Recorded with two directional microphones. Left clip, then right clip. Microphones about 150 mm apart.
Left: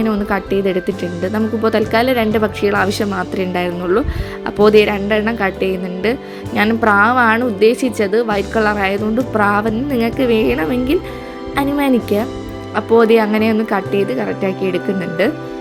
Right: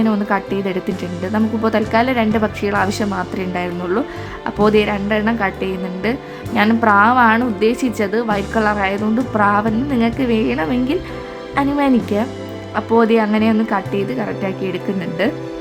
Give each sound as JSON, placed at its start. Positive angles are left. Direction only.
{"t": 0.3, "sound": "a woman's voice", "side_deg": 20}